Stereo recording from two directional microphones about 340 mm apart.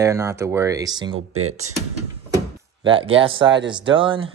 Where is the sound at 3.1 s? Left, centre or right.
Centre.